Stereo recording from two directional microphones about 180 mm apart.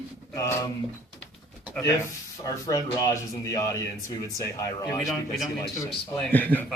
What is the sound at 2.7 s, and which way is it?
A man's voice, 20° left (ahead or behind).